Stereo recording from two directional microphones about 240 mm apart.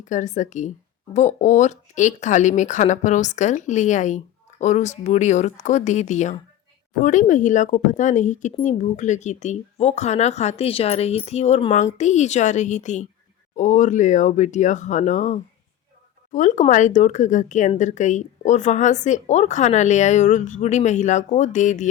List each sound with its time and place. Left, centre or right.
0.0 s speech: left